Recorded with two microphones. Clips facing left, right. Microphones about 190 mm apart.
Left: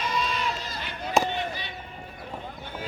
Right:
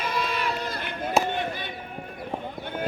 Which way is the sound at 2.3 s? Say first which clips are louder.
Right 6 dB; 50° right (ahead or behind).